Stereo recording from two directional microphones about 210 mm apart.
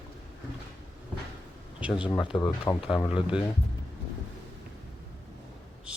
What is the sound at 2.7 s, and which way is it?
Speech, 15° left (ahead or behind).